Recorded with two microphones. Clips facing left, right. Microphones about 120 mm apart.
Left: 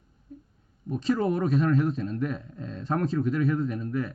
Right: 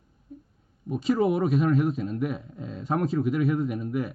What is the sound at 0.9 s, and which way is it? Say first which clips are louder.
A man's voice: right 2 dB; 5° right (ahead or behind).